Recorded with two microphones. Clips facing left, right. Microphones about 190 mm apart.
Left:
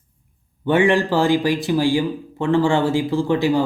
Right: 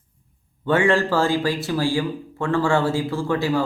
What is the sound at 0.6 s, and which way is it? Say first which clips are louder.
Speech: left 2 dB; 15° left (ahead or behind).